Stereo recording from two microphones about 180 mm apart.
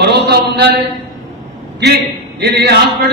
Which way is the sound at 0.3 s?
65° right (ahead or behind).